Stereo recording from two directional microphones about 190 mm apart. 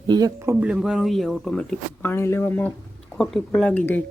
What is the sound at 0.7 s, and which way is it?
Speech, centre (ahead or behind).